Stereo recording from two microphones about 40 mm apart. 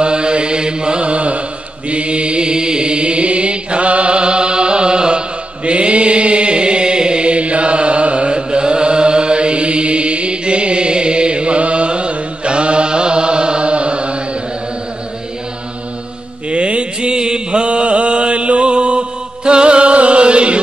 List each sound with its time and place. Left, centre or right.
0.0 s mantra: right
1.9 s chant: right
16.4 s mantra: right